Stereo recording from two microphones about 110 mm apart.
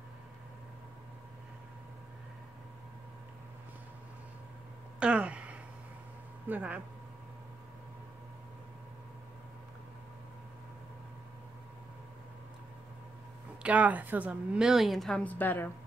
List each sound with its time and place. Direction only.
5.0 s a sound: 10° right (ahead or behind)
6.5 s a woman's voice: 15° right (ahead or behind)
13.6 s a woman's voice: 10° right (ahead or behind); by 15.2 s 5° left (ahead or behind)
15.2 s a woman's voice: 15° left (ahead or behind)